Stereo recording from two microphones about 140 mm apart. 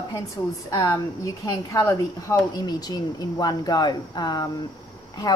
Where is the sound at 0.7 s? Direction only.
20° left (ahead or behind).